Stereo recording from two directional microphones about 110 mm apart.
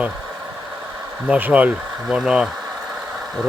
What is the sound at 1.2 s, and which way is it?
Speech, 10° right (ahead or behind).